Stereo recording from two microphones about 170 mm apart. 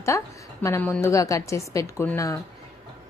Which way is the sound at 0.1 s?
15° left (ahead or behind).